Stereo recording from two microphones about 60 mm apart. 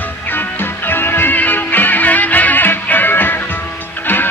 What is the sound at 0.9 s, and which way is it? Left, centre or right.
Music, left.